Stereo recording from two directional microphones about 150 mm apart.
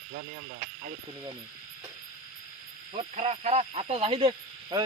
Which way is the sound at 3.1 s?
45° right (ahead or behind).